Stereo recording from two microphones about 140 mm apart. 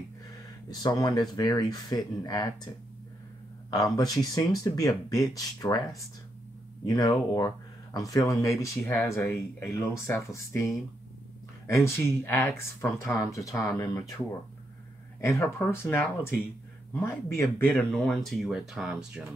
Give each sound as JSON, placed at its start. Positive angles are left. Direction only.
{"t": 0.7, "sound": "speech", "side_deg": 25}
{"t": 3.7, "sound": "speech", "side_deg": 25}
{"t": 6.9, "sound": "speech", "side_deg": 25}